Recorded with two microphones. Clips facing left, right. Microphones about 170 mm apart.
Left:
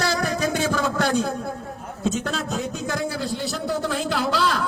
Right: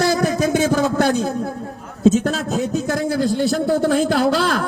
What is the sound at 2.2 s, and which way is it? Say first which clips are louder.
A man's voice: right 6 dB; 45° right (ahead or behind).